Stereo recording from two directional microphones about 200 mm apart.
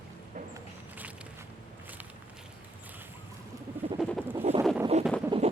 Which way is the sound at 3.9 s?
Centre (ahead or behind).